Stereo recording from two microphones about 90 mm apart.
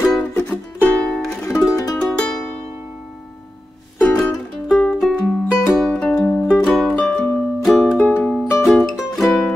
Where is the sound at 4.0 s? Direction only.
25° left (ahead or behind).